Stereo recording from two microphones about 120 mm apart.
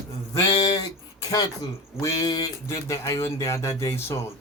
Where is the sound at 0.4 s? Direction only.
30° left (ahead or behind).